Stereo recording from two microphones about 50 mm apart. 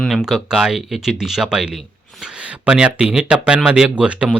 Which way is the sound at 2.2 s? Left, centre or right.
Right.